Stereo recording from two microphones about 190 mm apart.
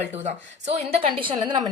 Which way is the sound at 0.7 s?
35° right (ahead or behind).